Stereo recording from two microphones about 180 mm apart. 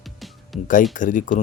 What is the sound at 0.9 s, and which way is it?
Speech, 45° left (ahead or behind).